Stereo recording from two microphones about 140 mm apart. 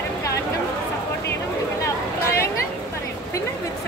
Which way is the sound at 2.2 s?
20° left (ahead or behind).